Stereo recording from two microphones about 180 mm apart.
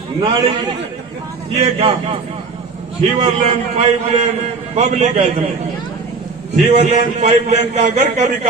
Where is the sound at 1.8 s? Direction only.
30° right (ahead or behind).